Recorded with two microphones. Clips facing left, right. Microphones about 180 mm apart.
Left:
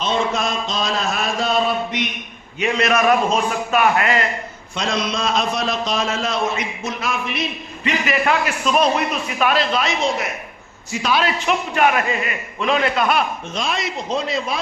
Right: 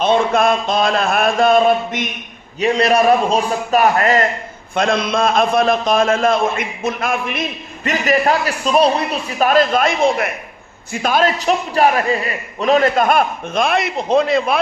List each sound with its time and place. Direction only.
0.0 s speech: 55° right (ahead or behind)
2.6 s a man's voice: 35° right (ahead or behind)
4.7 s a man's voice: 55° right (ahead or behind)
7.9 s a man's voice: 40° right (ahead or behind); by 14.6 s 55° right (ahead or behind)